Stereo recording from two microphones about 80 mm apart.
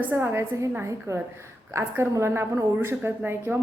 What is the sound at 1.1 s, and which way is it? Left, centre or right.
A woman's voice, right.